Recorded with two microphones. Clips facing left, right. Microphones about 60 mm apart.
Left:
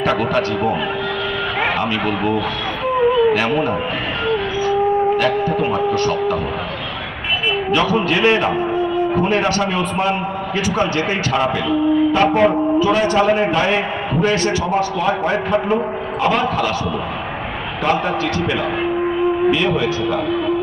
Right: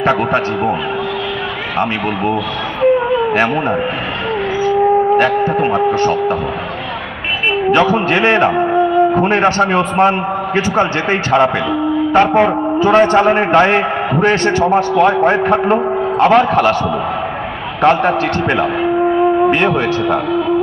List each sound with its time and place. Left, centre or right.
0.0 s a man's voice: right
3.3 s a man's voice: right
5.1 s a man's voice: right
7.7 s a man's voice: right
16.3 s a man's voice: right
17.9 s speech: right
19.5 s a man's voice: right